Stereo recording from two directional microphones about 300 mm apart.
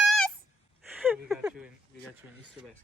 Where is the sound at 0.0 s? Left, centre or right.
Centre.